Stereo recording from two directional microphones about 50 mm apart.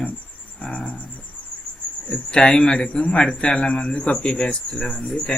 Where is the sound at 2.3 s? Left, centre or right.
Centre.